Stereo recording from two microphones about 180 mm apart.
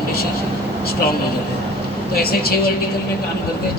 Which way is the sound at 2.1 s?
60° left (ahead or behind).